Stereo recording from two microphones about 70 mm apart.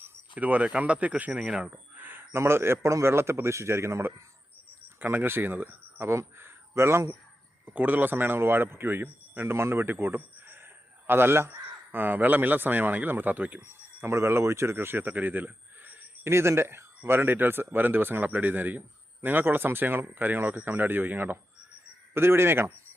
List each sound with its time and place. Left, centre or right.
0.0 s speech: right
2.0 s a man's voice: right
4.9 s speech: right
7.6 s speech: right
14.0 s speech: right
16.3 s a man's voice: right